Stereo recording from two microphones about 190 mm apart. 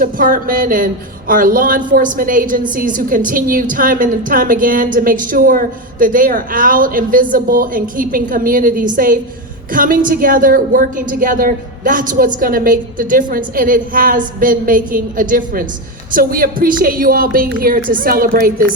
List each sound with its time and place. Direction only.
0.0 s a woman's voice: 45° right (ahead or behind)